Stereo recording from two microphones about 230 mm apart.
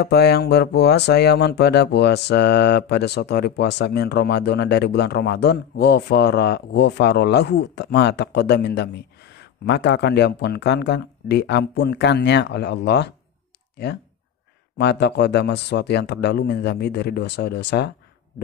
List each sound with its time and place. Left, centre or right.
0.0 s speech: left
14.8 s speech: left